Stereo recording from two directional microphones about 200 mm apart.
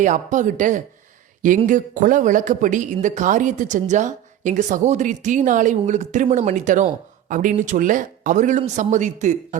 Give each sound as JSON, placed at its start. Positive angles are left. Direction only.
{"t": 0.0, "sound": "speech", "side_deg": -40}